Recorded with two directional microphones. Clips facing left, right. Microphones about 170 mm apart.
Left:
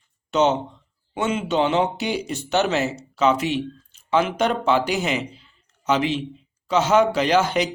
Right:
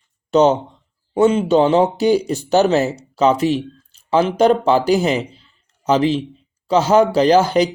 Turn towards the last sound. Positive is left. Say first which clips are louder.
# right 6 dB
turn(degrees=-35)  # may be behind; listen again after turning